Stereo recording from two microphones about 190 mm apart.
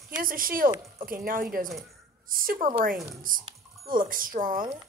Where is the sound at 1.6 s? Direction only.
Centre (ahead or behind).